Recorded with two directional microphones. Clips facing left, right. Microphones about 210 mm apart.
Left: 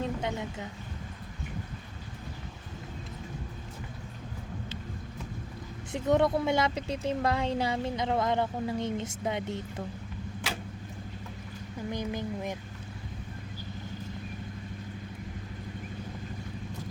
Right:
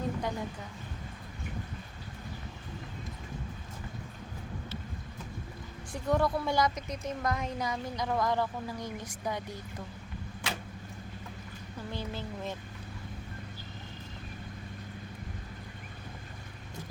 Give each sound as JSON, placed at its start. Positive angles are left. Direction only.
{"t": 0.0, "sound": "a woman's voice", "side_deg": 25}
{"t": 5.9, "sound": "speech", "side_deg": 20}
{"t": 11.9, "sound": "speech", "side_deg": 15}